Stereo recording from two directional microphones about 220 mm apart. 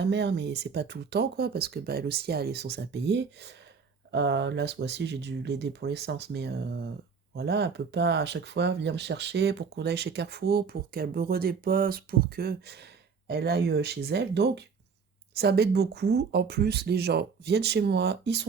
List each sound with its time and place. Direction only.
0.0 s speech: 50° right (ahead or behind)